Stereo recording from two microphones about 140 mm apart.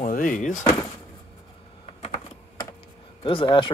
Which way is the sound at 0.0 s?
70° left (ahead or behind).